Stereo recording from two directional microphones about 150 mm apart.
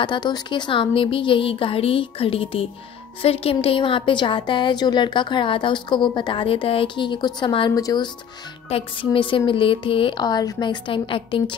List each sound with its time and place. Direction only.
0.0 s a woman's voice: 30° left (ahead or behind)